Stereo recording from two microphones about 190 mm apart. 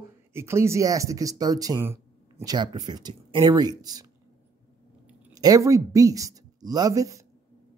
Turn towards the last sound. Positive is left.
turn(degrees=-15)  # may be behind; listen again after turning